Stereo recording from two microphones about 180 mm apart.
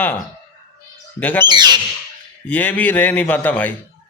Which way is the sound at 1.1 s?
10° left (ahead or behind).